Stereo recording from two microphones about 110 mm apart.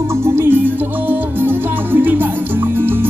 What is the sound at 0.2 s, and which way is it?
Music, 20° right (ahead or behind).